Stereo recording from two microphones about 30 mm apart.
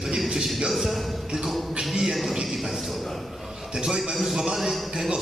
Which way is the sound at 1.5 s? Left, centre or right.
Centre.